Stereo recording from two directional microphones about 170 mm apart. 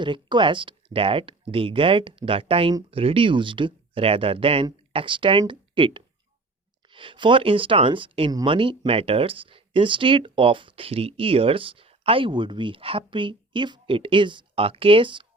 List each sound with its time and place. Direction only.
0.0 s speech: 25° right (ahead or behind)